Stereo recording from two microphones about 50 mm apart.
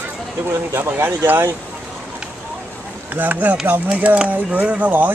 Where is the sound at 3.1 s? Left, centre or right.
Right.